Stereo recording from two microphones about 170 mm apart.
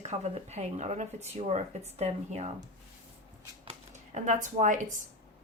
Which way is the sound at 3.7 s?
45° right (ahead or behind).